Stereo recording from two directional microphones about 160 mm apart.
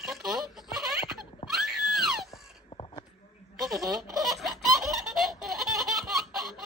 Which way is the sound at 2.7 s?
30° left (ahead or behind).